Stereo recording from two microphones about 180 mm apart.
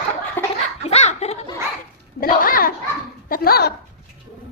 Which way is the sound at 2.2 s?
55° left (ahead or behind).